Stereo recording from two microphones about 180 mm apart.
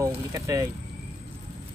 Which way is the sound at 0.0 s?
20° right (ahead or behind).